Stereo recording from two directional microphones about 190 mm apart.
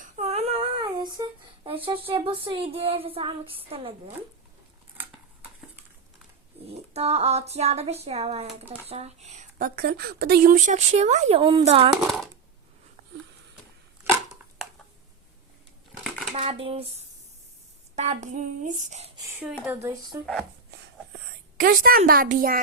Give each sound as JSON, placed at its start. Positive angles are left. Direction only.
{"t": 0.0, "sound": "a sound", "side_deg": -35}
{"t": 6.7, "sound": "a woman's voice", "side_deg": -35}
{"t": 16.3, "sound": "a woman's voice", "side_deg": -35}
{"t": 17.9, "sound": "a woman's voice", "side_deg": -35}
{"t": 19.4, "sound": "speech", "side_deg": -10}
{"t": 21.6, "sound": "a woman's voice", "side_deg": -45}